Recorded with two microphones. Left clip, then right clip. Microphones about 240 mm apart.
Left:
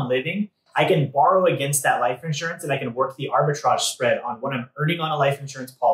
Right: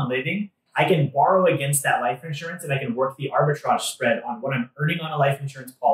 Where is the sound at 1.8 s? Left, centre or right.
Centre.